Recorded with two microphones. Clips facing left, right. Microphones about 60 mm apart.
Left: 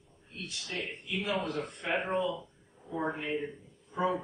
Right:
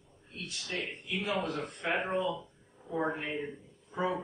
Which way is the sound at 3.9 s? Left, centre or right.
Centre.